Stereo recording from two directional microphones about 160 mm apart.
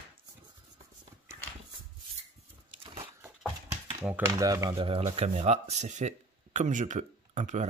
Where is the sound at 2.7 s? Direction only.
35° right (ahead or behind).